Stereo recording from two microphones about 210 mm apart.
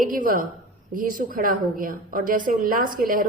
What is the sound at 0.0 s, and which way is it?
A woman's voice, 40° right (ahead or behind).